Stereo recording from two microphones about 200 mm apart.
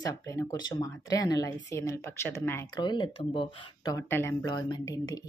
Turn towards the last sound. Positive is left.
turn(degrees=20)  # may be behind; listen again after turning